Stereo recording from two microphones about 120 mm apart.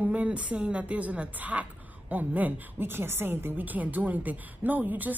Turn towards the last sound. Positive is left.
turn(degrees=-15)  # may be behind; listen again after turning